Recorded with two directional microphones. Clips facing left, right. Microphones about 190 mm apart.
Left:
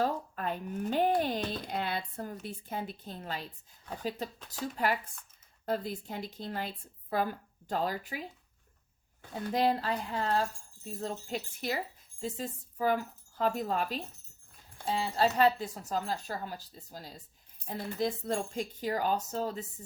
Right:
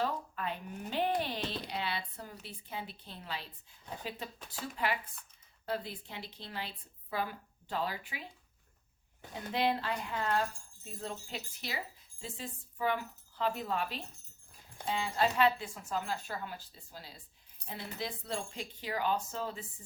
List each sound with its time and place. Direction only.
0.0 s speech: 45° left (ahead or behind)
4.8 s a woman's voice: 45° left (ahead or behind)
9.5 s a woman's voice: 40° left (ahead or behind)